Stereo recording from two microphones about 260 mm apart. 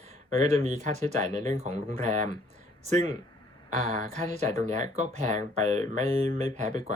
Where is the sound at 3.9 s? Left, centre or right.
Right.